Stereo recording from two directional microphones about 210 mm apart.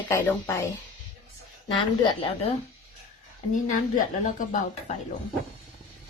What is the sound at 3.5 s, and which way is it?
Speech, 40° left (ahead or behind).